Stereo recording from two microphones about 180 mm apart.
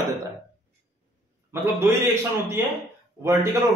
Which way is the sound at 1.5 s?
15° right (ahead or behind).